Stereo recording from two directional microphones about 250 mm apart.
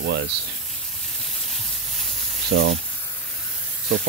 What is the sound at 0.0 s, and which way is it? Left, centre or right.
Speech, right.